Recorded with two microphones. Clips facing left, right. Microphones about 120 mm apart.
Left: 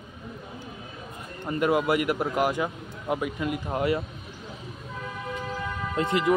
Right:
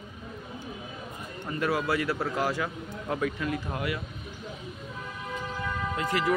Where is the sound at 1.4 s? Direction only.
20° left (ahead or behind).